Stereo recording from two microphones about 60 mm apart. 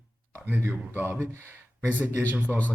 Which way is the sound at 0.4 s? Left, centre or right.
Right.